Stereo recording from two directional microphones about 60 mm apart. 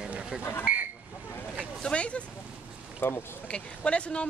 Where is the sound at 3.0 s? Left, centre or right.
Left.